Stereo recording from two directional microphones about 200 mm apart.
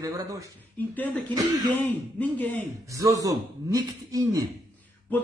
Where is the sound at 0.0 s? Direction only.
15° right (ahead or behind).